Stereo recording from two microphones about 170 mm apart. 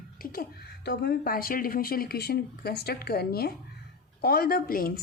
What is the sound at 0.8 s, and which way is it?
Speech, 70° left (ahead or behind).